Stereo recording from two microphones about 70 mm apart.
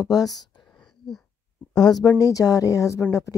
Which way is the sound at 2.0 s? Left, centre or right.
Left.